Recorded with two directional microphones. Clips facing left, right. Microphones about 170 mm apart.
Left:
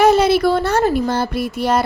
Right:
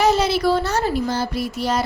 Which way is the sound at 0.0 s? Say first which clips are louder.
Left 5 dB; 55° left (ahead or behind).